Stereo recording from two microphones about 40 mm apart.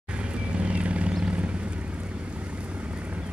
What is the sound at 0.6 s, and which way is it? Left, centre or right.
Vehicle, right.